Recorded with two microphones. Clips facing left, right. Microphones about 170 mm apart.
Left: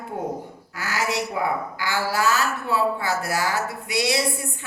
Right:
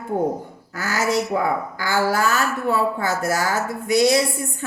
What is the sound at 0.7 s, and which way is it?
Speech, 45° right (ahead or behind).